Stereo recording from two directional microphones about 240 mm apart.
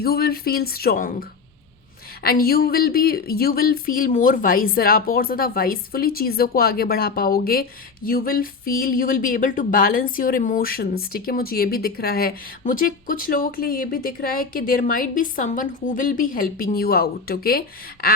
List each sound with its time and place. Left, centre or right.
0.0 s speech: left
2.2 s speech: left